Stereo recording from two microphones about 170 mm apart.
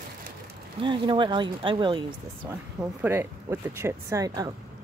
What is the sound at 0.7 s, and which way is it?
Speech, 30° right (ahead or behind).